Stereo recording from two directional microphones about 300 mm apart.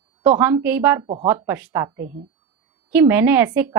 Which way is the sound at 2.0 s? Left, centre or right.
Right.